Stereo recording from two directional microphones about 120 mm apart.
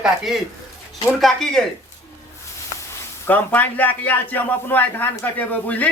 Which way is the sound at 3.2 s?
15° left (ahead or behind).